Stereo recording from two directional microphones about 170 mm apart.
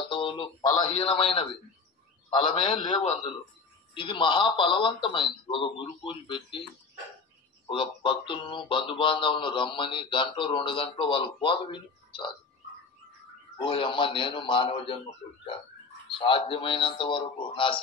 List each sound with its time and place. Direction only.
0.0 s a man's voice: 30° left (ahead or behind)
7.7 s speech: 30° left (ahead or behind)
13.6 s speech: 30° left (ahead or behind)
16.1 s a man's voice: 30° left (ahead or behind)